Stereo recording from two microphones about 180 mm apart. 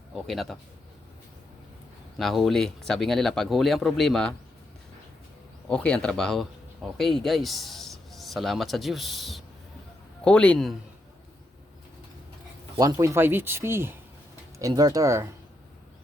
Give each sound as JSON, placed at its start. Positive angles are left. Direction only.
{"t": 0.3, "sound": "speech", "side_deg": 0}
{"t": 2.1, "sound": "speech", "side_deg": 0}
{"t": 5.6, "sound": "a man's voice", "side_deg": 5}
{"t": 12.7, "sound": "speech", "side_deg": -20}